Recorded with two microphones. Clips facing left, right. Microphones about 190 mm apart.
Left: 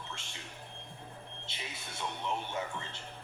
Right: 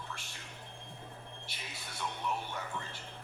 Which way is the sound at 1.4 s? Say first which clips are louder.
Left 2 dB; 25° left (ahead or behind).